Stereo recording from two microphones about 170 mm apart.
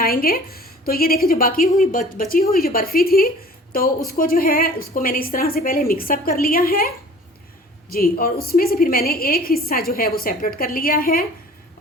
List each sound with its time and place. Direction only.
0.0 s a woman's voice: 60° left (ahead or behind)